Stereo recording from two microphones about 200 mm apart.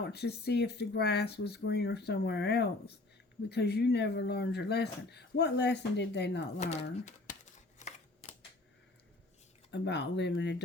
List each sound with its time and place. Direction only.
0.0 s speech: 55° left (ahead or behind)
6.6 s a sound: 35° left (ahead or behind)
9.7 s speech: 60° left (ahead or behind)